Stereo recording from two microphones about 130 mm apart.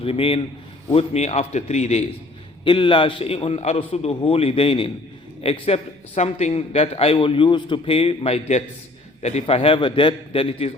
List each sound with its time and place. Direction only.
0.0 s a man's voice: 45° left (ahead or behind)
2.6 s a man's voice: 40° left (ahead or behind)